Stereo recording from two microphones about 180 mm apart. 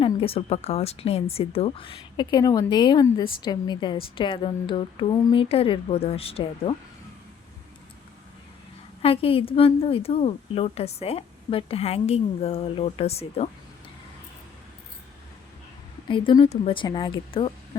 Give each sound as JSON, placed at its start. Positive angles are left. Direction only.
{"t": 0.0, "sound": "a woman's voice", "side_deg": 30}
{"t": 9.0, "sound": "a woman's voice", "side_deg": 30}
{"t": 16.0, "sound": "a woman's voice", "side_deg": 25}